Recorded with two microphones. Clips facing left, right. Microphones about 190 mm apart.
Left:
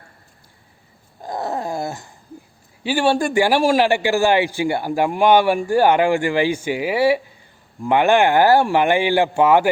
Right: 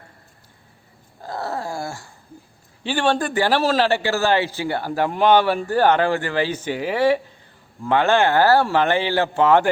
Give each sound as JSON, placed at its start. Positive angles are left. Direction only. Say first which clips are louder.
{"t": 1.2, "sound": "wail", "louder": "left 3 dB", "side_deg": 15}
{"t": 2.8, "sound": "a man's voice", "louder": "left 3 dB", "side_deg": 10}